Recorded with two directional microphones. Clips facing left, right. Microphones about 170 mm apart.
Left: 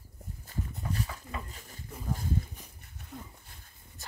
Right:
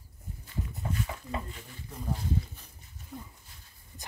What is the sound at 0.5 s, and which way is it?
Dog, 40° left (ahead or behind).